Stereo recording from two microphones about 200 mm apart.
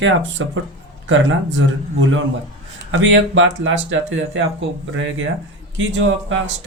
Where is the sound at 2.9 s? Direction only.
70° right (ahead or behind).